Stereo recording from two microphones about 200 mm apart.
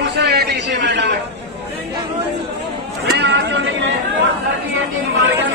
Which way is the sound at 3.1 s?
60° right (ahead or behind).